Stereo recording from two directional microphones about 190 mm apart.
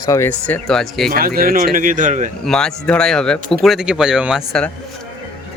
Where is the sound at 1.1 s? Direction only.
50° right (ahead or behind).